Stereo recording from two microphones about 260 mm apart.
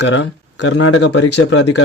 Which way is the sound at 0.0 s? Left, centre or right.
Left.